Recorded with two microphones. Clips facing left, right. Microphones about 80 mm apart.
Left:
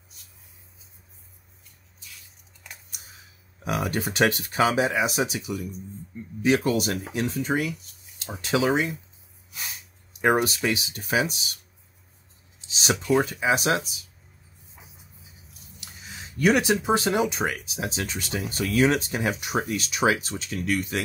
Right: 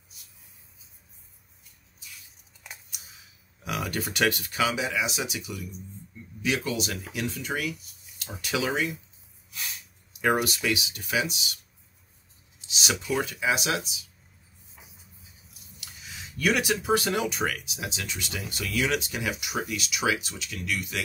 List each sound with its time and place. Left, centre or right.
3.6 s speech: left
9.5 s a sound: left
10.2 s speech: left
12.5 s a sound: left
13.1 s speech: left
15.8 s speech: left
17.6 s speech: left